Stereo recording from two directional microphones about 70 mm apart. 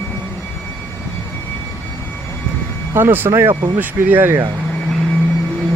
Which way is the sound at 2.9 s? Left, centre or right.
Right.